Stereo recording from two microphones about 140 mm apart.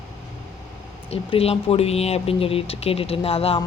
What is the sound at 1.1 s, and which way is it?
A woman's voice, 45° left (ahead or behind).